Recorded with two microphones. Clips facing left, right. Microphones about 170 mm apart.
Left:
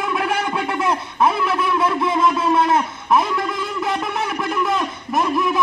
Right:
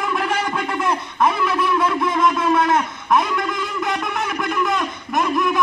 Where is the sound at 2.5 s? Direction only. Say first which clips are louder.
Left 1 dB; 30° left (ahead or behind).